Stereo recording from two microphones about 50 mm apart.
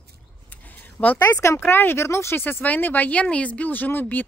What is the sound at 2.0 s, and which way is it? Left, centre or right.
Speech, left.